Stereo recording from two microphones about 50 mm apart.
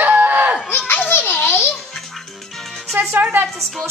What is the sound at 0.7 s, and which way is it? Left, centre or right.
Baby laughter, left.